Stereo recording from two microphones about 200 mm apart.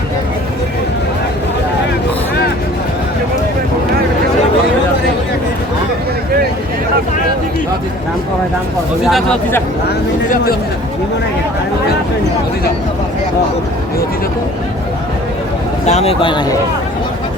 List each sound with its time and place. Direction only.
9.0 s speech: centre (ahead or behind)
15.9 s a man's voice: 30° left (ahead or behind)